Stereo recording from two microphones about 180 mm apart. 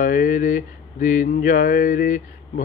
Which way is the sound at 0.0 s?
50° left (ahead or behind).